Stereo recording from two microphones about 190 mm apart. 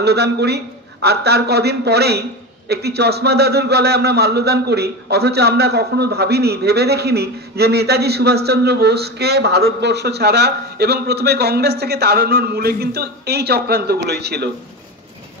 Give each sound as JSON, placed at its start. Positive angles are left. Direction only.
{"t": 0.0, "sound": "a man's voice", "side_deg": -60}